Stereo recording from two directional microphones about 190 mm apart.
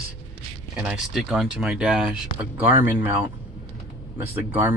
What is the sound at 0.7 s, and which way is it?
Speech, 5° right (ahead or behind).